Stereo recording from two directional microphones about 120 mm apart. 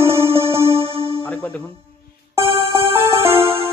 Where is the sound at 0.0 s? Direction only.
20° right (ahead or behind).